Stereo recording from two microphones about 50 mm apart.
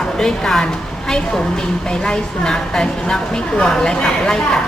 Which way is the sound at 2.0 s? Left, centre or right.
Centre.